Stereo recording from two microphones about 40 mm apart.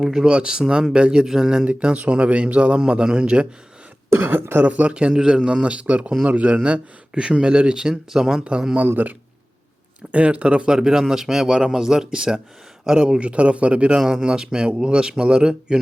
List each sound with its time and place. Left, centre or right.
0.0 s a man's voice: centre
1.6 s a man's voice: right
4.1 s speech: right
4.6 s a man's voice: right
7.1 s a man's voice: right
10.1 s a man's voice: right
14.0 s a man's voice: centre